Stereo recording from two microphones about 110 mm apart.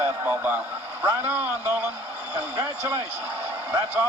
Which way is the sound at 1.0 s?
20° right (ahead or behind).